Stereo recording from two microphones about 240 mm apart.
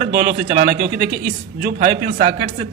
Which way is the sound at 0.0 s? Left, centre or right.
Right.